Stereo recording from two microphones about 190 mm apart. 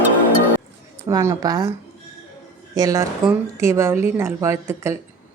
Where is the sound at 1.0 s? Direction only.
15° right (ahead or behind).